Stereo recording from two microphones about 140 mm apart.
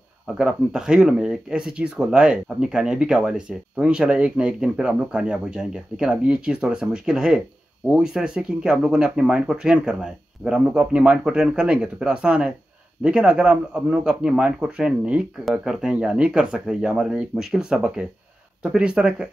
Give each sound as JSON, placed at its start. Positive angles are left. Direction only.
{"t": 0.3, "sound": "speech", "side_deg": -5}